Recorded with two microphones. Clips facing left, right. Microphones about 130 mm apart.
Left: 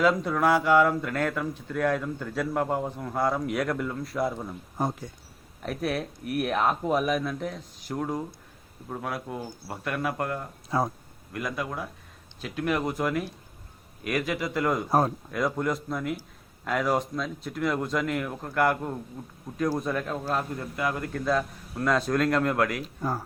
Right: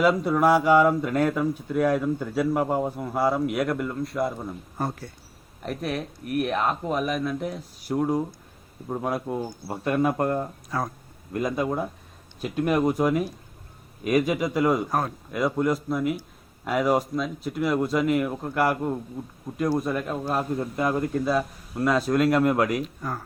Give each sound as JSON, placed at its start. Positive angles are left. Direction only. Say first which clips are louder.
{"t": 0.0, "sound": "speech", "louder": "right 3 dB", "side_deg": -10}
{"t": 4.8, "sound": "speech", "louder": "left 1 dB", "side_deg": 15}
{"t": 5.6, "sound": "speech", "louder": "even", "side_deg": 0}
{"t": 8.9, "sound": "speech", "louder": "right 6 dB", "side_deg": -20}
{"t": 10.7, "sound": "speech", "louder": "left 5 dB", "side_deg": 25}
{"t": 11.3, "sound": "speech", "louder": "right 6 dB", "side_deg": -25}
{"t": 12.4, "sound": "speech", "louder": "right 5 dB", "side_deg": -15}
{"t": 14.8, "sound": "speech", "louder": "left 3 dB", "side_deg": 35}
{"t": 15.3, "sound": "speech", "louder": "right 3 dB", "side_deg": -5}
{"t": 21.2, "sound": "speech", "louder": "right 2 dB", "side_deg": -10}